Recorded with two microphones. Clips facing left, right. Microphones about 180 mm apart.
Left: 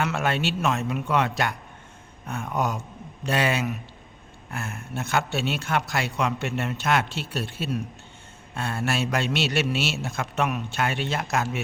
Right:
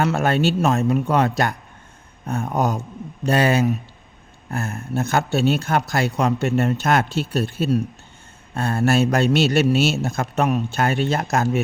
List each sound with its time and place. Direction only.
0.0 s speech: 40° right (ahead or behind)